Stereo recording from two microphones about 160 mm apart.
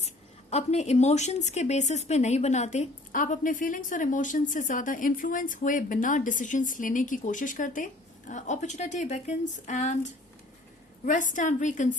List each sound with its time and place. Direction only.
0.5 s a woman's voice: 45° left (ahead or behind)